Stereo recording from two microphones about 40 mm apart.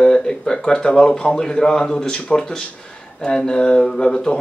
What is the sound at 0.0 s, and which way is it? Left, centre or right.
Speech, centre.